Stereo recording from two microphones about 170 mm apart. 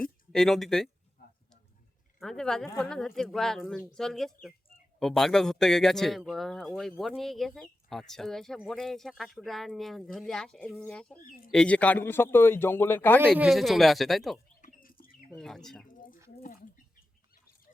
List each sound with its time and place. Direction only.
0.0 s speech: 5° left (ahead or behind)
2.1 s speech: 5° left (ahead or behind)
11.2 s speech: 55° left (ahead or behind)
11.5 s a man's voice: 5° left (ahead or behind)
13.4 s speech: centre (ahead or behind)
14.6 s bird: 55° left (ahead or behind)
15.3 s speech: 5° left (ahead or behind)
15.9 s a sound: 55° left (ahead or behind)
16.4 s bird: 50° left (ahead or behind)